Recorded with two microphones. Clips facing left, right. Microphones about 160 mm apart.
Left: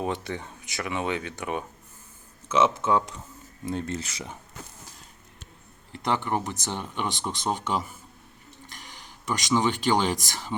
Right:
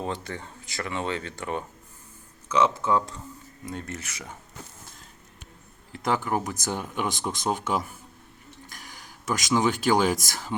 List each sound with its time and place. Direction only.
0.0 s speech: 20° left (ahead or behind)
5.9 s speech: 5° right (ahead or behind)
9.2 s speech: 5° right (ahead or behind)